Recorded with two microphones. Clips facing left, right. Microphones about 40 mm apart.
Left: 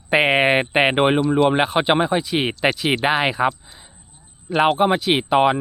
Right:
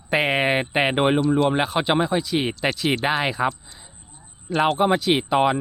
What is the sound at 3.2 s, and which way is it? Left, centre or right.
Speech, left.